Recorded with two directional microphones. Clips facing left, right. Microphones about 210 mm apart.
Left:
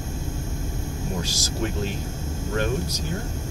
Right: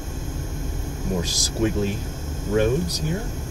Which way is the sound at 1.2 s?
15° right (ahead or behind).